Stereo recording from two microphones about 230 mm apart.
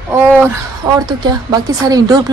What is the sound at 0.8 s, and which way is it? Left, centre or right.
Speech, centre.